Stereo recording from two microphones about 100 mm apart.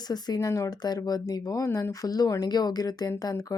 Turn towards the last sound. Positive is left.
turn(degrees=40)  # may be behind; listen again after turning